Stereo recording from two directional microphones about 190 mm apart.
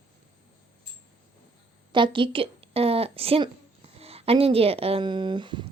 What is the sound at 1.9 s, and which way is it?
A woman's voice, 25° right (ahead or behind).